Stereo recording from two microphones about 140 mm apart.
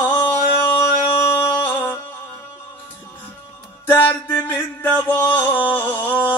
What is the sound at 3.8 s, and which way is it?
Music, 15° left (ahead or behind).